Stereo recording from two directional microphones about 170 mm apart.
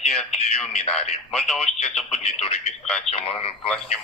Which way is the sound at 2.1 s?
35° left (ahead or behind).